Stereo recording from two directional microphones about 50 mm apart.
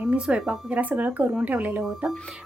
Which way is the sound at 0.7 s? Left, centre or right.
Right.